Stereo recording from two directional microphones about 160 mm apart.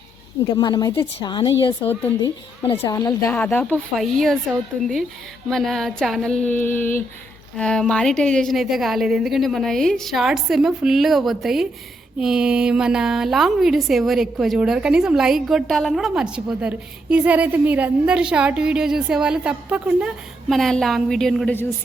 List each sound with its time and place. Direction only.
0.5 s a woman's voice: 25° left (ahead or behind)
2.8 s a woman's voice: 20° left (ahead or behind)
3.3 s a woman's voice: 10° left (ahead or behind)
5.5 s a woman's voice: centre (ahead or behind)
21.5 s speech: 15° left (ahead or behind)